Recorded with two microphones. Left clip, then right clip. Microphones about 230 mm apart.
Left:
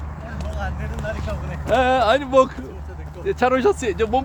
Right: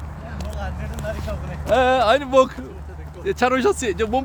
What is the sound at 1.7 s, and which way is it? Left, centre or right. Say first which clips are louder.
Speech: right 1 dB; right.